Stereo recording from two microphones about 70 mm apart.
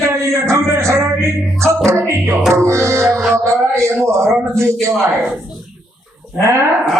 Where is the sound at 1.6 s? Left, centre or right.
Right.